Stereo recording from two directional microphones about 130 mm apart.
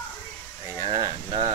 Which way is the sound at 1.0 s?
35° right (ahead or behind).